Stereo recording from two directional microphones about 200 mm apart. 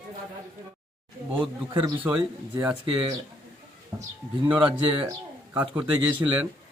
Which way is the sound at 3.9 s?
20° right (ahead or behind).